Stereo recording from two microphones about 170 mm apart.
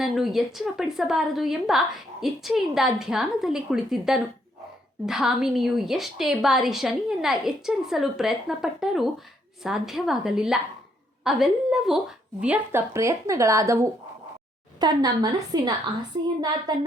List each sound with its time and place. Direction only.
0.0 s a woman's voice: centre (ahead or behind); by 16.7 s 25° right (ahead or behind)